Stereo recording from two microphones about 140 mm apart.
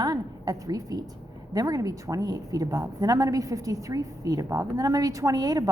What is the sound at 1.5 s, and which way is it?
A woman's voice, 25° right (ahead or behind).